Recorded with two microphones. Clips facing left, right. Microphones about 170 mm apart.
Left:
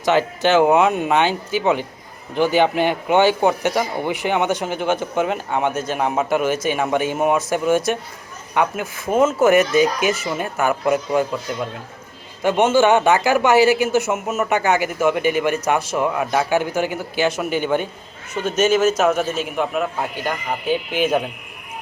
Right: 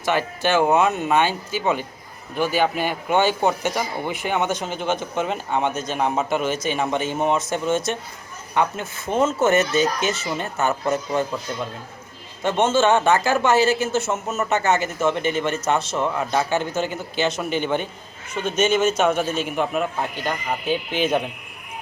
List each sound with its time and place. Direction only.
0.0 s a man's voice: 20° left (ahead or behind)
12.4 s a man's voice: 10° left (ahead or behind)